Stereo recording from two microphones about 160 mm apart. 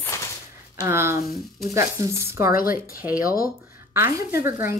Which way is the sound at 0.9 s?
15° right (ahead or behind).